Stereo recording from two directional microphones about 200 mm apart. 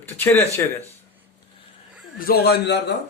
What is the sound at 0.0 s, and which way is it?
Speech, 10° left (ahead or behind).